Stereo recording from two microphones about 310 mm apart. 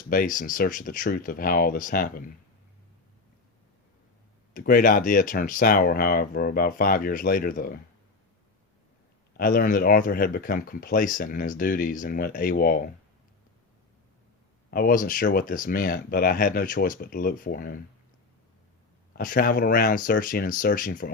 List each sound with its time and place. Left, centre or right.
0.1 s speech: left
4.5 s speech: left
9.4 s speech: left
14.7 s speech: left
19.1 s speech: left